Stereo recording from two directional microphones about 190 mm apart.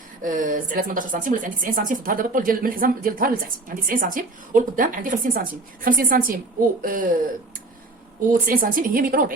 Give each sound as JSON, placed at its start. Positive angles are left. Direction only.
{"t": 0.2, "sound": "speech", "side_deg": -45}
{"t": 8.3, "sound": "speech", "side_deg": -45}